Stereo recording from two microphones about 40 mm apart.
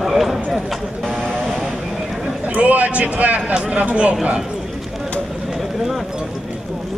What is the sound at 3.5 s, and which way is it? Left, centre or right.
Speech, right.